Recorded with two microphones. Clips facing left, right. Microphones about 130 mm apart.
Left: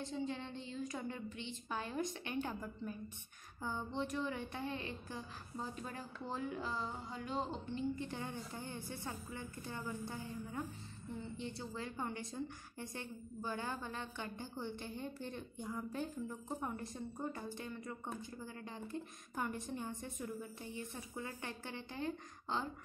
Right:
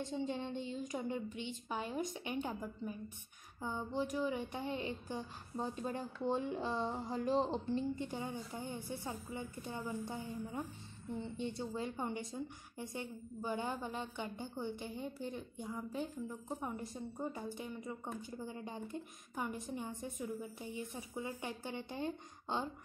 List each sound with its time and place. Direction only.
0.1 s a woman's voice: 20° right (ahead or behind)
8.0 s a woman's voice: 15° right (ahead or behind)
19.3 s a woman's voice: 5° right (ahead or behind); by 22.7 s 20° right (ahead or behind)